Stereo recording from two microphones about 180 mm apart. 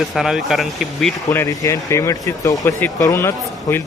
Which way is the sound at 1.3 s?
15° left (ahead or behind).